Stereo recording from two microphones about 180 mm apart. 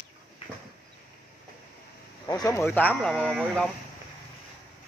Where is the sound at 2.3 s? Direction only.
15° left (ahead or behind).